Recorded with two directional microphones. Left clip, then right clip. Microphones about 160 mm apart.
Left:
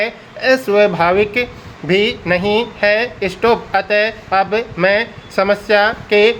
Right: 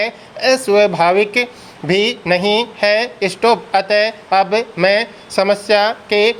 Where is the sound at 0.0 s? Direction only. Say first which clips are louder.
Even; 25° right (ahead or behind).